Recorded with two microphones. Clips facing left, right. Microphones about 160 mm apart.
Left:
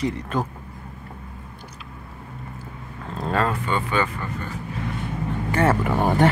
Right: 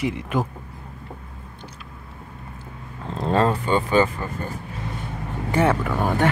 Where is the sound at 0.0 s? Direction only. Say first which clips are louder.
Right 1 dB; 15° right (ahead or behind).